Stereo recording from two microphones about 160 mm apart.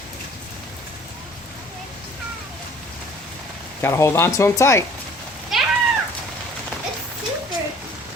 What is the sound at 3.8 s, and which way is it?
Speech, 15° left (ahead or behind).